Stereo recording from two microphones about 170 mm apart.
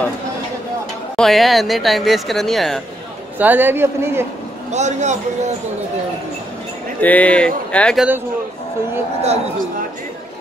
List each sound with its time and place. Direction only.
1.1 s speech: centre (ahead or behind)
3.3 s a man's voice: 10° right (ahead or behind)
4.6 s a man's voice: 40° right (ahead or behind)
7.0 s speech: 10° left (ahead or behind)
9.2 s a man's voice: 40° right (ahead or behind)